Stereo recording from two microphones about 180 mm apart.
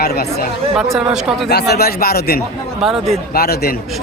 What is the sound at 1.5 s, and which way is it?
Speech, 65° left (ahead or behind).